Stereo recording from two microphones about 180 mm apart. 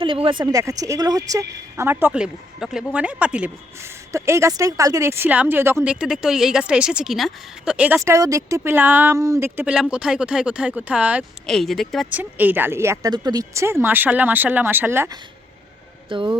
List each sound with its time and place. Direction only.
0.0 s speech: 30° right (ahead or behind); by 12.0 s centre (ahead or behind)
12.1 s speech: 10° right (ahead or behind)
16.0 s speech: 25° right (ahead or behind)